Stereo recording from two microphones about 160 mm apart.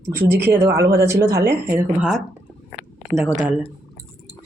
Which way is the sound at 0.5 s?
15° right (ahead or behind).